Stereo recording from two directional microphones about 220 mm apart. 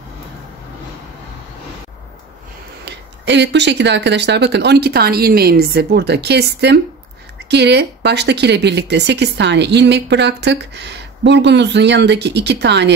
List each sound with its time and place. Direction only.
2.8 s speech: 50° right (ahead or behind)